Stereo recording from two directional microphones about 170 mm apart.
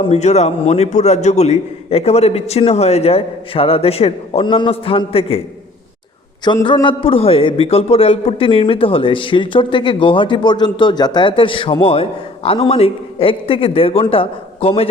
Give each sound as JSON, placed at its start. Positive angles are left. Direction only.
{"t": 0.0, "sound": "a man's voice", "side_deg": 40}
{"t": 6.4, "sound": "a man's voice", "side_deg": 25}